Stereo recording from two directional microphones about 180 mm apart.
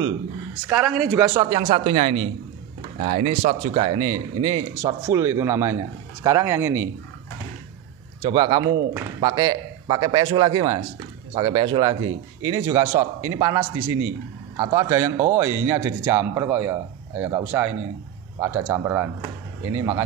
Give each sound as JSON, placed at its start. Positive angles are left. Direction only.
{"t": 0.7, "sound": "speech", "side_deg": -5}
{"t": 1.3, "sound": "speech", "side_deg": -25}
{"t": 1.7, "sound": "speech", "side_deg": -35}
{"t": 8.2, "sound": "speech", "side_deg": -25}